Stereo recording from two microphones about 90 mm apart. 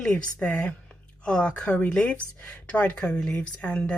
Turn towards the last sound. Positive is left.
turn(degrees=15)  # may be behind; listen again after turning